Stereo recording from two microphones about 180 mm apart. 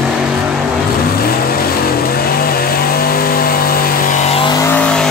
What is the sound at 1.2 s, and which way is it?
Vehicle, 55° left (ahead or behind).